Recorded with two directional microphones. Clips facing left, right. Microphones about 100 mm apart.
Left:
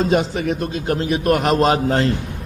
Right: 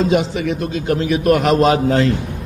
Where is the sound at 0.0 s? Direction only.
40° left (ahead or behind).